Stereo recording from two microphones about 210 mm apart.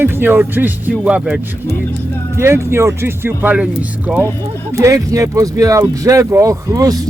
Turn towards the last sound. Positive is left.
turn(degrees=-15)  # may be behind; listen again after turning